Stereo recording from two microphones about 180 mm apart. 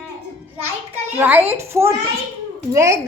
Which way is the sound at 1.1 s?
10° right (ahead or behind).